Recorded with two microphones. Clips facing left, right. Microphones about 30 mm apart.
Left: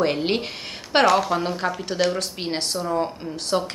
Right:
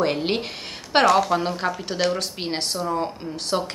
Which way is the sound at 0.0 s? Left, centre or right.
Centre.